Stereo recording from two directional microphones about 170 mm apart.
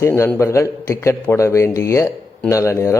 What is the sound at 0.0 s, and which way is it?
A man's voice, 15° left (ahead or behind).